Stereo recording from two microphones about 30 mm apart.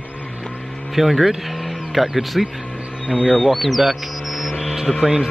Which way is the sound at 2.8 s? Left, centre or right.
Right.